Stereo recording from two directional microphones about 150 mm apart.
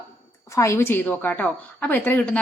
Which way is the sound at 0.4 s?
20° left (ahead or behind).